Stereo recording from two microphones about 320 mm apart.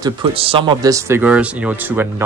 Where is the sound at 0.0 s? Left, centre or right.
Centre.